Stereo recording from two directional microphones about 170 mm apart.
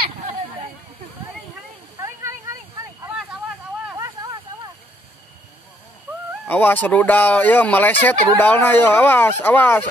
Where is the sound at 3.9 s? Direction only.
20° right (ahead or behind).